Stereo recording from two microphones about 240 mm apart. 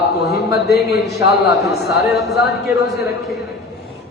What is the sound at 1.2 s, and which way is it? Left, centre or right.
A man's voice, centre.